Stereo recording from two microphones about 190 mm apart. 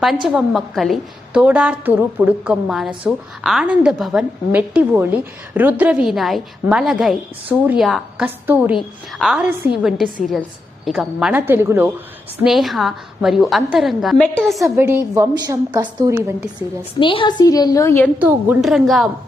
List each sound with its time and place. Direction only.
0.3 s a woman's voice: centre (ahead or behind)
12.4 s a woman's voice: centre (ahead or behind)
14.6 s a woman's voice: 10° right (ahead or behind)
17.0 s a woman's voice: 25° left (ahead or behind)
18.2 s a woman's voice: 5° right (ahead or behind)